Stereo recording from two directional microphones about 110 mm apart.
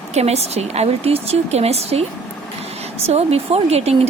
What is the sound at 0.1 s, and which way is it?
Speech, 75° right (ahead or behind).